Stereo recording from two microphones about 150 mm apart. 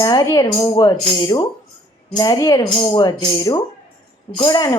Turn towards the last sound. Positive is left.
turn(degrees=25)  # may be behind; listen again after turning